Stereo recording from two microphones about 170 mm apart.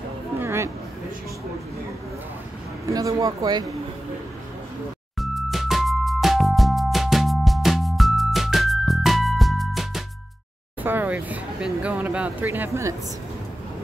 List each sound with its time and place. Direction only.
0.4 s a sound: 15° right (ahead or behind)
2.9 s speech: 20° right (ahead or behind)
5.2 s music: centre (ahead or behind)
10.8 s speech: 10° right (ahead or behind)